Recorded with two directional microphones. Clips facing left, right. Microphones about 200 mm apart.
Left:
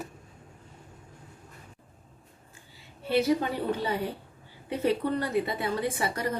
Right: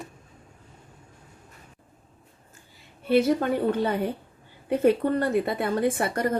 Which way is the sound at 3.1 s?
55° right (ahead or behind).